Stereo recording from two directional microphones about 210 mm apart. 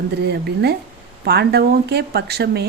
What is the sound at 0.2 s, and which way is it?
Speech, 50° right (ahead or behind).